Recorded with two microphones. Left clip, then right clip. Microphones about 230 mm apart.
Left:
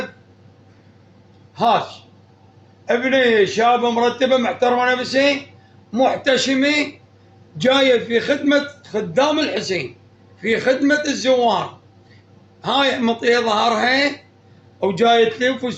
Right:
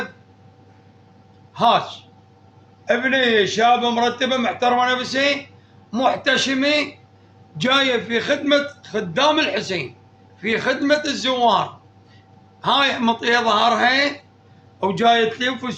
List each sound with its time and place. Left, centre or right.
2.8 s a man's voice: right